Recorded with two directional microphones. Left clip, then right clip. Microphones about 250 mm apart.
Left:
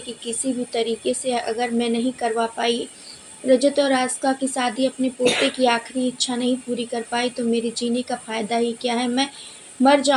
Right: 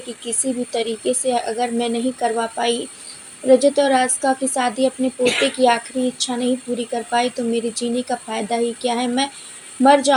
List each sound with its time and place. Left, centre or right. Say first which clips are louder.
0.7 s speech: right 1 dB; right